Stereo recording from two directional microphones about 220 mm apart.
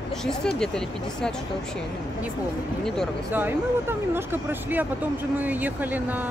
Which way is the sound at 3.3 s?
10° right (ahead or behind).